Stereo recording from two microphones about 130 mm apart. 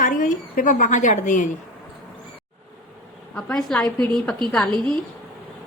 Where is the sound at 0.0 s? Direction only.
90° left; by 1.5 s 70° left (ahead or behind).